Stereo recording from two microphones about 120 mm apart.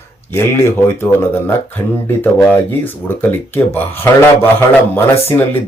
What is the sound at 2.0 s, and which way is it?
Speech, 20° left (ahead or behind).